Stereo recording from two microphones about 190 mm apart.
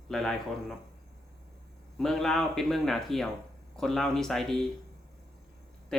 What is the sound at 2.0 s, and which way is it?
A man's voice, centre (ahead or behind).